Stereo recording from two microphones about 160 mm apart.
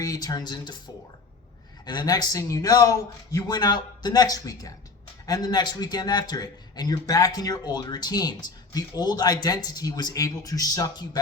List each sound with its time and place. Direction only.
0.0 s a man's voice: 20° left (ahead or behind)
1.8 s a man's voice: 25° left (ahead or behind)